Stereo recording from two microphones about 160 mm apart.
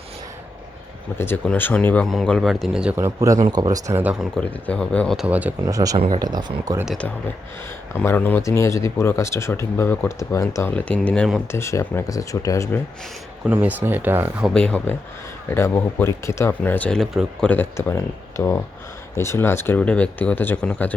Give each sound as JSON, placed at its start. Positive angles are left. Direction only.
{"t": 1.2, "sound": "speech", "side_deg": 15}
{"t": 3.0, "sound": "speech", "side_deg": -20}
{"t": 4.0, "sound": "speech", "side_deg": -5}
{"t": 4.4, "sound": "speech", "side_deg": 5}
{"t": 5.2, "sound": "speech", "side_deg": -10}
{"t": 5.6, "sound": "speech", "side_deg": -20}
{"t": 7.9, "sound": "speech", "side_deg": 10}
{"t": 11.6, "sound": "speech", "side_deg": 15}
{"t": 13.4, "sound": "speech", "side_deg": -10}
{"t": 14.4, "sound": "speech", "side_deg": 5}